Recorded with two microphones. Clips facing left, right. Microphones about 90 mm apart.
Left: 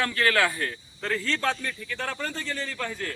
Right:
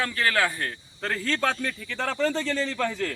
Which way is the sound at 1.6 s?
90° right.